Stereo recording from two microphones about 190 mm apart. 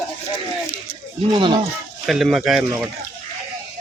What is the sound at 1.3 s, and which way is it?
Speech, 25° right (ahead or behind).